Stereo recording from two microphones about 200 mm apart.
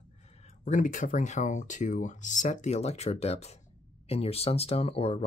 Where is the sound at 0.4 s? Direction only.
40° left (ahead or behind).